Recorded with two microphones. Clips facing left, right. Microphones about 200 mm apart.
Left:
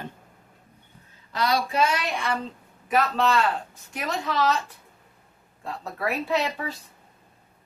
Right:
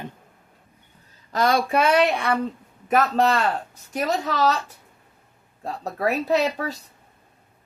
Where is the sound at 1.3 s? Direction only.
50° right (ahead or behind).